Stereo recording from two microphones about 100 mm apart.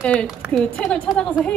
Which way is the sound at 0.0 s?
10° left (ahead or behind).